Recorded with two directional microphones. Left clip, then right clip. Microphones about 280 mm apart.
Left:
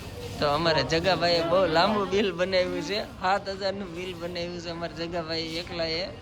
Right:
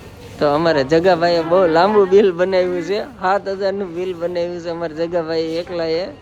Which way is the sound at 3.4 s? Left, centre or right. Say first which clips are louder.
Right 10 dB; right.